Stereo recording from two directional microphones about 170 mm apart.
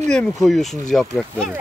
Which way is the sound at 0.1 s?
5° left (ahead or behind).